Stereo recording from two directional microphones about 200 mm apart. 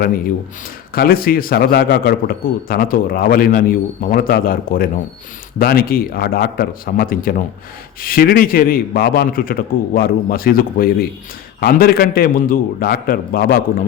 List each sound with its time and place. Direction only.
0.9 s a man's voice: 45° left (ahead or behind)